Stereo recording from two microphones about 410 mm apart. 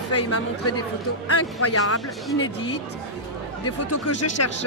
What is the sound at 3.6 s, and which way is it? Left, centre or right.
Speech, left.